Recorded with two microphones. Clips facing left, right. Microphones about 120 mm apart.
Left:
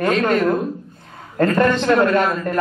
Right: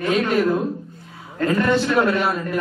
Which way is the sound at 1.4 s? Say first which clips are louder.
Left 2 dB; 50° left (ahead or behind).